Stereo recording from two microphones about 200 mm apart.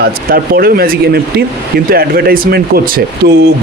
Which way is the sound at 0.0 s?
50° right (ahead or behind).